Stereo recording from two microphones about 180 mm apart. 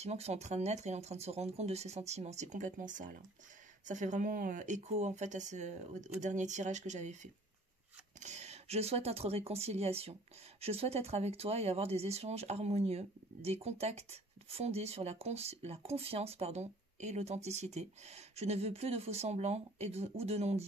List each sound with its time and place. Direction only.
0.0 s speech: 35° right (ahead or behind)
8.2 s speech: 40° right (ahead or behind)